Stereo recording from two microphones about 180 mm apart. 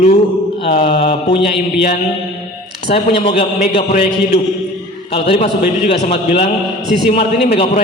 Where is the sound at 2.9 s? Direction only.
35° left (ahead or behind).